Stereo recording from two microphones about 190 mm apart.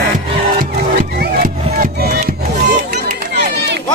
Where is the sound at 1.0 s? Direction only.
50° right (ahead or behind).